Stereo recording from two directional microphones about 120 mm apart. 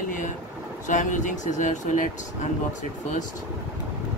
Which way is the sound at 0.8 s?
90° left.